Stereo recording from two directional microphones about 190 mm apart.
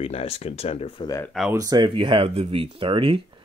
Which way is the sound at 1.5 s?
20° right (ahead or behind).